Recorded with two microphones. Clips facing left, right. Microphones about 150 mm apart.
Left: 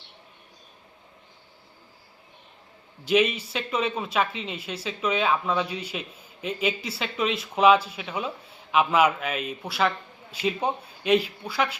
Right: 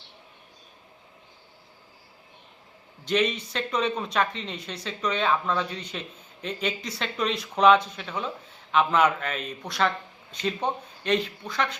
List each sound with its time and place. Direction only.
3.0 s speech: 5° left (ahead or behind)